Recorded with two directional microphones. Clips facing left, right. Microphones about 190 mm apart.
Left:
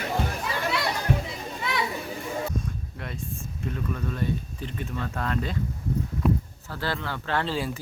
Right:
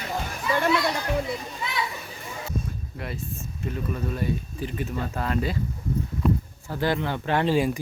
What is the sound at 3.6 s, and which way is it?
Speech, 5° right (ahead or behind).